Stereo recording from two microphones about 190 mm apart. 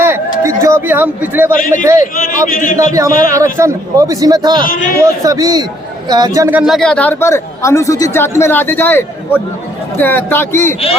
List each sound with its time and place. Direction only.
0.0 s a sound: 15° right (ahead or behind)
1.8 s speech: 15° right (ahead or behind)
2.5 s a man's voice: 45° left (ahead or behind)
2.7 s speech: 15° right (ahead or behind)
4.6 s a man's voice: 50° left (ahead or behind)
5.0 s speech: 15° right (ahead or behind); by 10.8 s 10° left (ahead or behind)